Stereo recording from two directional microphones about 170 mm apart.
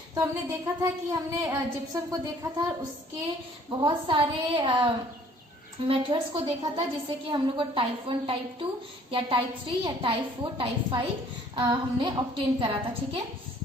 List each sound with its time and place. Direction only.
0.1 s a woman's voice: 20° right (ahead or behind)
3.7 s a woman's voice: 25° right (ahead or behind)